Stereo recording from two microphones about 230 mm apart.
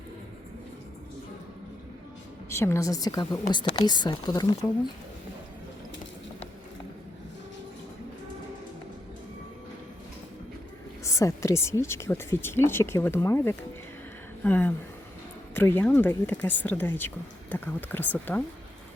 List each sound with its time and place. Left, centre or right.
2.5 s speech: centre
11.0 s speech: centre